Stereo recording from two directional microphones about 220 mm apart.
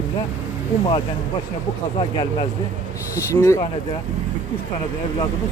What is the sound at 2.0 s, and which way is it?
Speech, 20° left (ahead or behind).